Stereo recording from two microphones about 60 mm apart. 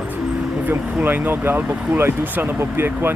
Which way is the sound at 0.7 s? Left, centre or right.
Right.